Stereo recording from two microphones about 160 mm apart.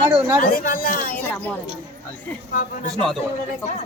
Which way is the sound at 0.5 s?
60° left (ahead or behind).